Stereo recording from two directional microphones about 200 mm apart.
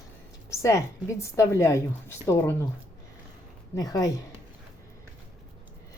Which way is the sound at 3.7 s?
20° left (ahead or behind).